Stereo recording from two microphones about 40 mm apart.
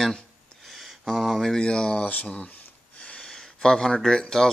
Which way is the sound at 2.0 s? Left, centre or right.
Left.